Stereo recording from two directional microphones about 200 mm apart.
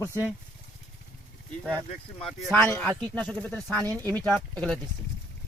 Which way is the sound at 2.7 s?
5° left (ahead or behind).